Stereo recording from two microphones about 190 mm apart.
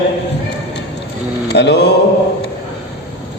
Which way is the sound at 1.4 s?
60° left (ahead or behind).